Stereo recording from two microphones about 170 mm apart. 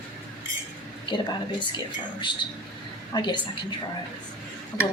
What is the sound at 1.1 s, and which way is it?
Speech, 25° left (ahead or behind).